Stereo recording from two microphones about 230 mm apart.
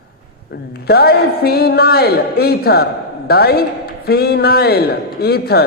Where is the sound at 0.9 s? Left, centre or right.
Left.